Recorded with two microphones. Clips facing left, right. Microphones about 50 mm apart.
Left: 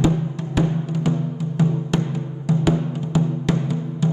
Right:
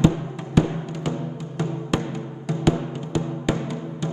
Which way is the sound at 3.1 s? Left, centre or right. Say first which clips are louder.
Left 3 dB; centre.